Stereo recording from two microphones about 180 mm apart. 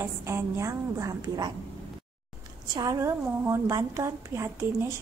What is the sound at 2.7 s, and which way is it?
A woman's voice, 20° right (ahead or behind).